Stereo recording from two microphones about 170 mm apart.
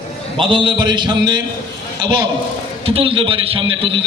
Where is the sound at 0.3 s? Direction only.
30° right (ahead or behind).